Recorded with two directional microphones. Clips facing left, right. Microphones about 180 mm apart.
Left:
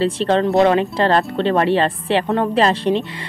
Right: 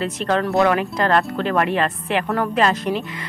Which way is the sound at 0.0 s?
30° left (ahead or behind).